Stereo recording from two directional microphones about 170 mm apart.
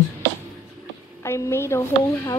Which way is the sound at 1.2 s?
15° left (ahead or behind).